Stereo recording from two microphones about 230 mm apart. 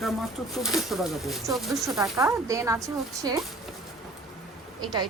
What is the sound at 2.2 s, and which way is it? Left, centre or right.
A woman's voice, centre.